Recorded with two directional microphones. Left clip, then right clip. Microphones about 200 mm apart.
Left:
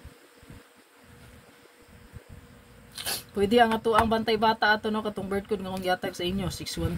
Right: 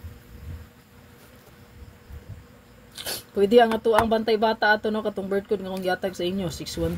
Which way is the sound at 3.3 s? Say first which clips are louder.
Right 4 dB; 25° left (ahead or behind).